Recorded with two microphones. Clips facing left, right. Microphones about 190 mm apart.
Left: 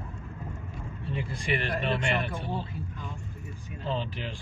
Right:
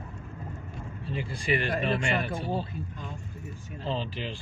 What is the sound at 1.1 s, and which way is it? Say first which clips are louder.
Speech: even; 30° right (ahead or behind).